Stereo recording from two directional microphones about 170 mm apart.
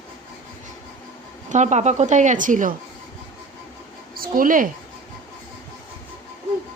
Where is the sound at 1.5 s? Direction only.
45° right (ahead or behind).